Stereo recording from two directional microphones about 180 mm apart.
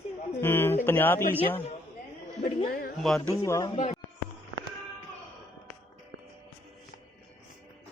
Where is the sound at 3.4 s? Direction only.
15° left (ahead or behind).